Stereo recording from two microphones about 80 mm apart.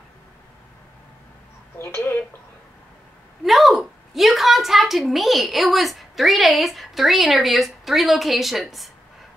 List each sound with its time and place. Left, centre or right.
1.8 s a woman's voice: left
3.4 s a woman's voice: centre